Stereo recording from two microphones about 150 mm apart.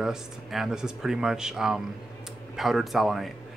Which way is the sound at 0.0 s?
Centre (ahead or behind).